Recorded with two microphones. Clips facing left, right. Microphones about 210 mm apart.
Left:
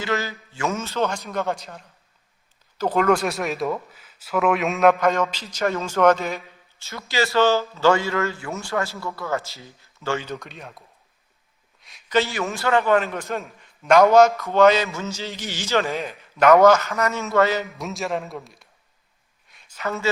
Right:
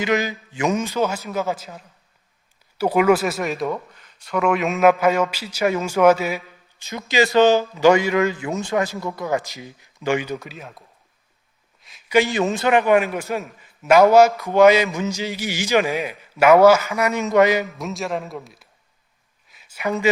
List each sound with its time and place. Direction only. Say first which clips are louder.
0.0 s a man's voice: right 5 dB; 15° right (ahead or behind)
6.7 s a man's voice: right 5 dB; 15° right (ahead or behind)
10.4 s speech: right 2 dB; centre (ahead or behind)
11.8 s a sound: right 1 dB; centre (ahead or behind)
12.1 s a man's voice: right 4 dB; 15° right (ahead or behind)
17.7 s speech: right 1 dB; centre (ahead or behind)
19.5 s a sound: right 4 dB; 5° right (ahead or behind)